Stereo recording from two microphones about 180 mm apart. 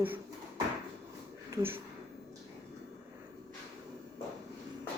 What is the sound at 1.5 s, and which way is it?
Speech, 15° right (ahead or behind).